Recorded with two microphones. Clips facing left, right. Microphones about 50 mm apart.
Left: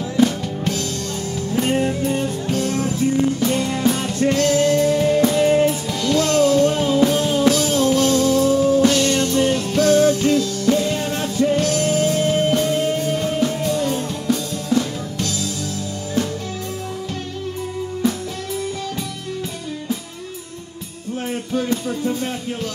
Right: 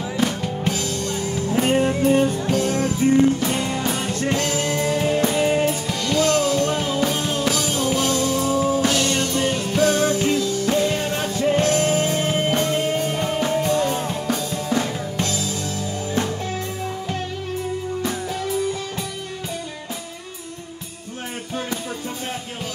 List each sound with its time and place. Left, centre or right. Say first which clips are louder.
0.2 s music: left 5 dB; centre
3.3 s music: left 3 dB; centre
11.5 s music: even; right